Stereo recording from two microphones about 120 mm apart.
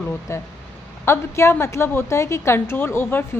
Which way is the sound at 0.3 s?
25° left (ahead or behind).